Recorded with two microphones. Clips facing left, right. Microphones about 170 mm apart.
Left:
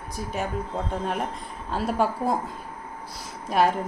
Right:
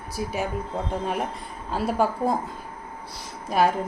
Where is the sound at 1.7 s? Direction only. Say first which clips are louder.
Right 1 dB; centre (ahead or behind).